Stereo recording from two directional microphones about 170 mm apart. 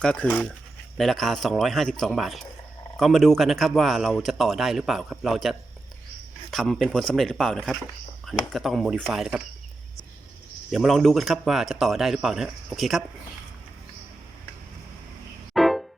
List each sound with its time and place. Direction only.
0.0 s speech: 5° left (ahead or behind)
10.7 s speech: centre (ahead or behind)
15.5 s music: centre (ahead or behind)